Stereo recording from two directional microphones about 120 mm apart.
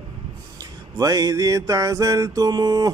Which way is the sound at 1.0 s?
30° right (ahead or behind).